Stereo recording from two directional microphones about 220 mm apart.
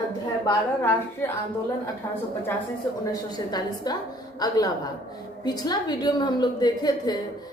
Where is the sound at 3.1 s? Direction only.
20° left (ahead or behind).